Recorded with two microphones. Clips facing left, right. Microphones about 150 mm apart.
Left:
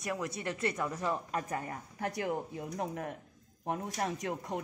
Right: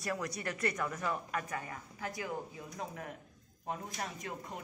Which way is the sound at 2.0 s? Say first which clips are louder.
Left 5 dB; 60° left (ahead or behind).